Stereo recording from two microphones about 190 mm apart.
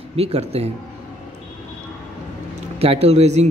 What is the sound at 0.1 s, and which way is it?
Speech, 30° right (ahead or behind).